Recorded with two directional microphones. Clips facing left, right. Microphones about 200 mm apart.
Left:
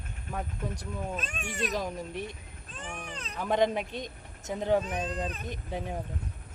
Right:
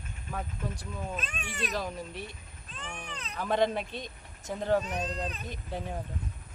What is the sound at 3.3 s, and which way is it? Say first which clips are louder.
Speech: left 1 dB; 15° left (ahead or behind).